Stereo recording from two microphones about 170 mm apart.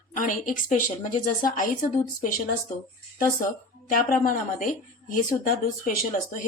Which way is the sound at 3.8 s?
55° left (ahead or behind).